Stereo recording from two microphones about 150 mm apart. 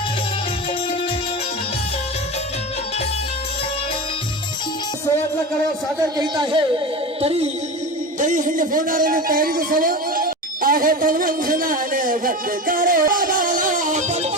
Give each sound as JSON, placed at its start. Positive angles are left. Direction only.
{"t": 6.1, "sound": "a man's voice", "side_deg": -30}
{"t": 7.2, "sound": "music", "side_deg": -40}
{"t": 8.2, "sound": "speech", "side_deg": -60}